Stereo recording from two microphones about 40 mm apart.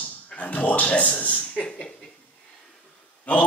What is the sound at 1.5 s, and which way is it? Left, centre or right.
Speech, left.